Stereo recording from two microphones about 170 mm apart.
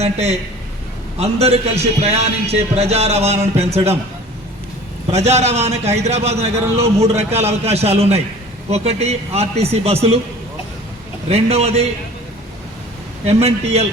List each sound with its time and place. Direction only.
0.0 s speech: 40° right (ahead or behind)
5.1 s speech: 40° right (ahead or behind)
11.3 s speech: 35° right (ahead or behind)
13.2 s speech: 35° right (ahead or behind)